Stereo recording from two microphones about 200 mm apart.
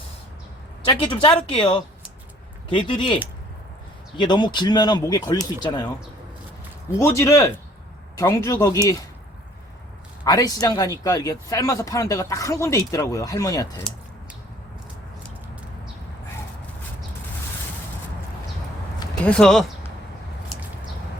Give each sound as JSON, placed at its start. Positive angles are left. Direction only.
{"t": 0.9, "sound": "speech", "side_deg": 25}
{"t": 4.2, "sound": "speech", "side_deg": 20}
{"t": 6.9, "sound": "speech", "side_deg": 15}
{"t": 10.2, "sound": "speech", "side_deg": 20}
{"t": 19.2, "sound": "speech", "side_deg": 5}